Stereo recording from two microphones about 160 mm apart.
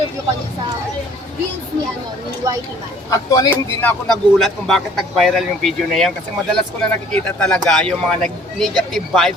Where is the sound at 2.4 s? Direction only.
25° right (ahead or behind).